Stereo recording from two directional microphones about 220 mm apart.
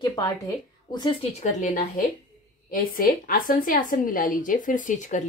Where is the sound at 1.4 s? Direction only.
35° left (ahead or behind).